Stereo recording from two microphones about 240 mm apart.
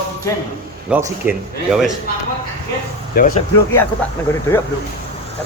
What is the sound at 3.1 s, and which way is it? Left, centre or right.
Speech, left.